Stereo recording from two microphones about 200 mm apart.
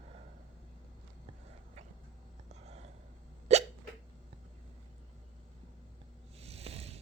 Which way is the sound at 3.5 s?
35° right (ahead or behind).